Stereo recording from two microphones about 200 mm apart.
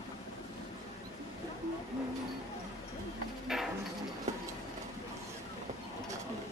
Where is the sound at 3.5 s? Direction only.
Centre (ahead or behind).